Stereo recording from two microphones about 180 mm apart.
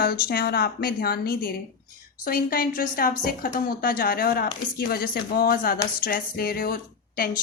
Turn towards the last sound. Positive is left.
turn(degrees=55)  # may be behind; listen again after turning